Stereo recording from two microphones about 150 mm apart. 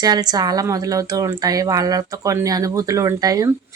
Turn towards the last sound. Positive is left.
turn(degrees=-25)  # may be behind; listen again after turning